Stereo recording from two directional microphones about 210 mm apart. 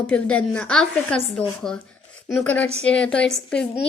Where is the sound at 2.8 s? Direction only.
5° left (ahead or behind).